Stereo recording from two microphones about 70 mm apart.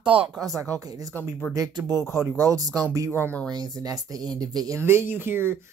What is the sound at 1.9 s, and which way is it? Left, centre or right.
Speech, left.